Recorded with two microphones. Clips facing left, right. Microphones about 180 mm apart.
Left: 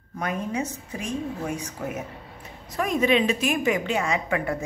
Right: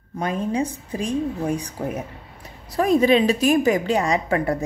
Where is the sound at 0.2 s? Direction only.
30° right (ahead or behind).